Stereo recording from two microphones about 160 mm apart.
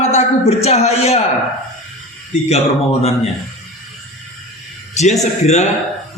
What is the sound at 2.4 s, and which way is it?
Speech, 40° left (ahead or behind).